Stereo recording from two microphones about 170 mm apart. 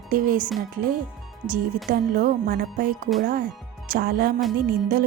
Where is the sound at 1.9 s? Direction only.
65° right (ahead or behind).